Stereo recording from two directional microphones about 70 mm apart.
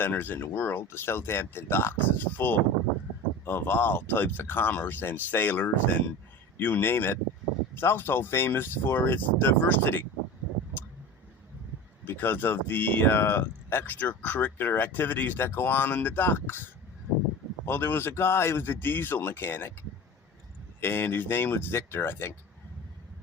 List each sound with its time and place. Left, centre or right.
0.0 s speech: left
12.0 s speech: left
17.7 s speech: left
20.8 s speech: left